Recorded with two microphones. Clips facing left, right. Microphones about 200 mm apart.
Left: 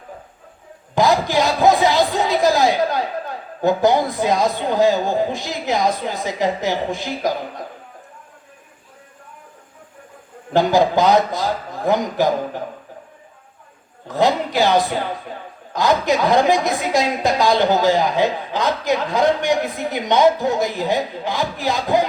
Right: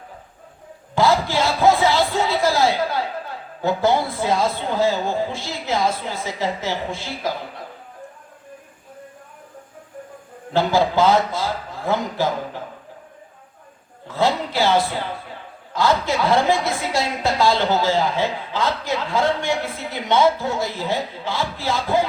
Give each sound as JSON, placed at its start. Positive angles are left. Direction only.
{"t": 0.9, "sound": "speech", "side_deg": 15}
{"t": 10.5, "sound": "a woman's voice", "side_deg": 15}
{"t": 14.1, "sound": "a woman's voice", "side_deg": 15}